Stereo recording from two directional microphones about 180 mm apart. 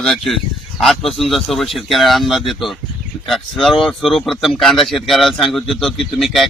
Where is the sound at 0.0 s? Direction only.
Centre (ahead or behind).